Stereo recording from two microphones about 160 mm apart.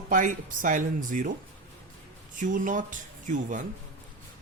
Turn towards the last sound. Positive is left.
turn(degrees=-55)  # may be behind; listen again after turning